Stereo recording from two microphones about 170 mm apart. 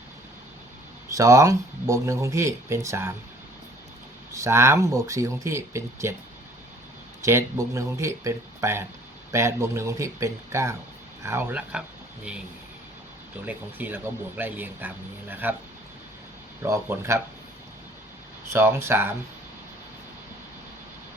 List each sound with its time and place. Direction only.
1.1 s speech: 20° right (ahead or behind)
4.3 s speech: 15° right (ahead or behind)
7.2 s speech: 15° right (ahead or behind)
13.4 s speech: 10° right (ahead or behind)
16.6 s speech: 15° right (ahead or behind)
18.5 s speech: 15° right (ahead or behind)